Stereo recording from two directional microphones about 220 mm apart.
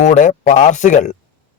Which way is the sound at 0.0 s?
35° left (ahead or behind).